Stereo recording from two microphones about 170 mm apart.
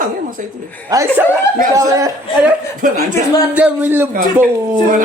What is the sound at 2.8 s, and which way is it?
Speech, 50° right (ahead or behind).